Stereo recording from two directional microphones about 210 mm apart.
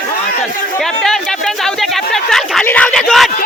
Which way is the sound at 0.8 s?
Centre (ahead or behind).